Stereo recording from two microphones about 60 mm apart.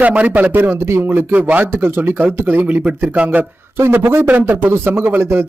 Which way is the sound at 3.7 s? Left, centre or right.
Right.